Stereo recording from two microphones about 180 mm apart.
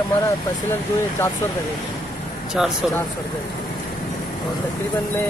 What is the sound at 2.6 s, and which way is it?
Speech, 5° right (ahead or behind).